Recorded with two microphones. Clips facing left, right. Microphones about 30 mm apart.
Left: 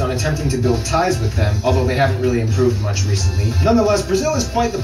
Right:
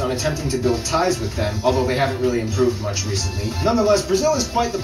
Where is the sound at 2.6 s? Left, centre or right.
Centre.